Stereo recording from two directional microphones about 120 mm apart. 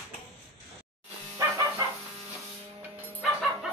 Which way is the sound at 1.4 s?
25° right (ahead or behind).